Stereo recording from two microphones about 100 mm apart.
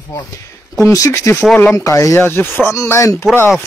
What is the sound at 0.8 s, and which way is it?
Speech, 30° left (ahead or behind).